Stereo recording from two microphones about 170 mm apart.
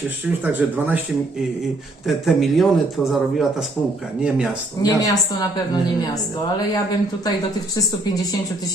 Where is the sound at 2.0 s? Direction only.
Centre (ahead or behind).